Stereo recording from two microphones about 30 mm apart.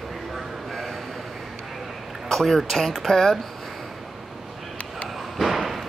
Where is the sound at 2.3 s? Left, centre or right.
Centre.